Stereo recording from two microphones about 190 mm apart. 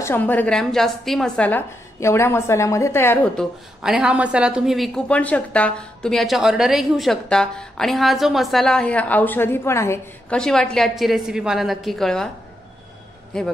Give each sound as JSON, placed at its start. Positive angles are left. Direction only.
{"t": 0.0, "sound": "speech", "side_deg": 10}
{"t": 3.8, "sound": "a woman's voice", "side_deg": -5}
{"t": 13.3, "sound": "a woman's voice", "side_deg": 5}